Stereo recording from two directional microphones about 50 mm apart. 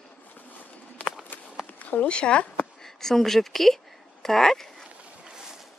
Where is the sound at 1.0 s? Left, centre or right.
Left.